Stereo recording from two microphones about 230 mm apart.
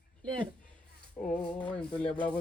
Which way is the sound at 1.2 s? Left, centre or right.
Centre.